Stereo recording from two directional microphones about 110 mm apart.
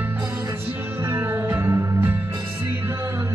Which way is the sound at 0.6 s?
20° right (ahead or behind).